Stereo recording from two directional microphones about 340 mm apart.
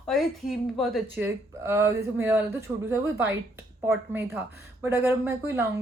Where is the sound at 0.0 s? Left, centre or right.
Centre.